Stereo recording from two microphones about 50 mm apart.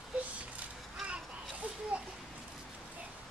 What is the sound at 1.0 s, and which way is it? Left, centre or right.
Children playing, right.